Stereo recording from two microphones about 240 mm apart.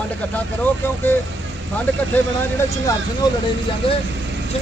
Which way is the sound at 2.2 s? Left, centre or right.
Centre.